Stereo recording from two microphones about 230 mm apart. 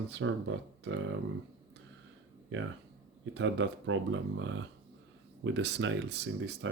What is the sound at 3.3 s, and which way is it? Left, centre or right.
Speech, right.